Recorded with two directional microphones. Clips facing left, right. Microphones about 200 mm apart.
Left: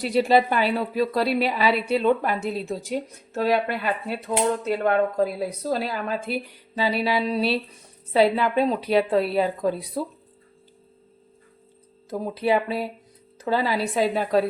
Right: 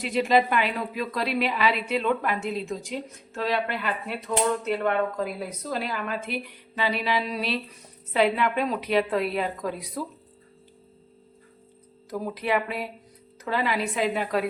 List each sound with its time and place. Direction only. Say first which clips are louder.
0.0 s a woman's voice: left 3 dB; 35° left (ahead or behind)
4.3 s speech: left 1 dB; 20° left (ahead or behind)
4.8 s a woman's voice: left 4 dB; 35° left (ahead or behind)
12.1 s a woman's voice: left 4 dB; 25° left (ahead or behind)